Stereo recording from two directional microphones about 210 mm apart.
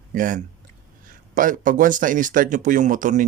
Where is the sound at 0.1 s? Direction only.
40° right (ahead or behind).